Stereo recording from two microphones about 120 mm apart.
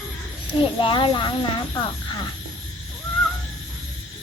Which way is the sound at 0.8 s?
45° left (ahead or behind).